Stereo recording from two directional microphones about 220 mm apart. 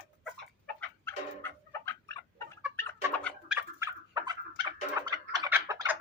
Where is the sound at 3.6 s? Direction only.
10° right (ahead or behind).